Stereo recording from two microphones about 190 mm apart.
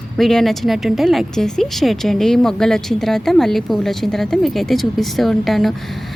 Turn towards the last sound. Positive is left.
turn(degrees=0)  # may be behind; listen again after turning